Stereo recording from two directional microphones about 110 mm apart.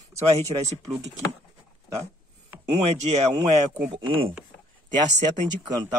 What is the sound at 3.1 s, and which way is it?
Speech, 90° right.